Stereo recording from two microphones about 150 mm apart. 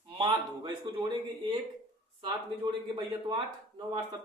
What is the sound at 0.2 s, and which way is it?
Speech, 30° right (ahead or behind).